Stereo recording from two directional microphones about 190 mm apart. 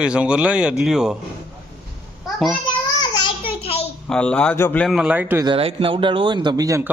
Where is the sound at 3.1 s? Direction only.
25° left (ahead or behind).